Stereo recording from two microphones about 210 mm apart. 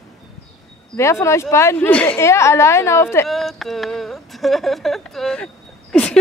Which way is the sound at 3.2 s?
Centre (ahead or behind).